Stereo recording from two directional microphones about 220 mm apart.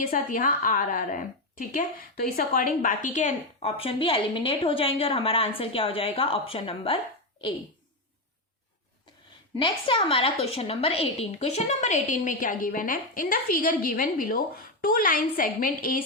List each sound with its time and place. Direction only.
0.0 s a woman's voice: 40° left (ahead or behind)
9.6 s a woman's voice: 25° left (ahead or behind); by 16.0 s 40° left (ahead or behind)